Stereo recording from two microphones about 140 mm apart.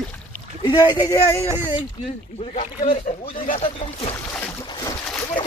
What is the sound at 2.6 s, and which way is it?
Speech, 40° left (ahead or behind).